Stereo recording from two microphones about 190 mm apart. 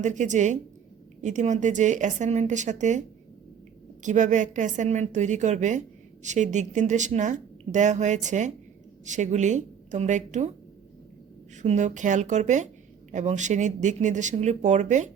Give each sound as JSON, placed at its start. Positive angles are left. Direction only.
{"t": 0.0, "sound": "speech", "side_deg": -40}
{"t": 4.0, "sound": "speech", "side_deg": -40}
{"t": 11.5, "sound": "speech", "side_deg": -40}